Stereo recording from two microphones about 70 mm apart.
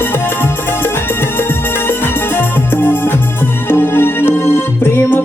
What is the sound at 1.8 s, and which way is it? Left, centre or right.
Music, left.